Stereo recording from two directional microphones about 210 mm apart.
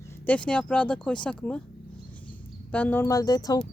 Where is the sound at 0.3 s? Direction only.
5° left (ahead or behind).